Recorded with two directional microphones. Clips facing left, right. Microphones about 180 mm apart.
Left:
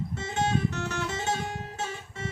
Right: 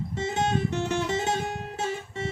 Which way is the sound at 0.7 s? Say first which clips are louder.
Right 5 dB; 15° right (ahead or behind).